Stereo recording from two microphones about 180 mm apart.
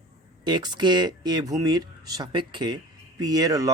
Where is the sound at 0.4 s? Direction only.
25° right (ahead or behind).